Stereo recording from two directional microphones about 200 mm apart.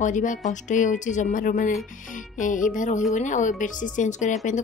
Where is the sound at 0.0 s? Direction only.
40° left (ahead or behind).